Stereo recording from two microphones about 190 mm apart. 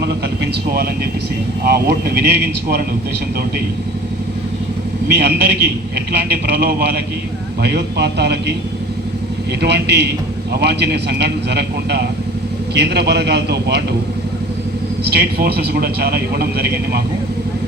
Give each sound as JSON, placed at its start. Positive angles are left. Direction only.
{"t": 1.6, "sound": "a man's voice", "side_deg": -55}
{"t": 5.0, "sound": "a man's voice", "side_deg": -60}
{"t": 9.6, "sound": "a man's voice", "side_deg": -60}
{"t": 15.0, "sound": "a man's voice", "side_deg": -55}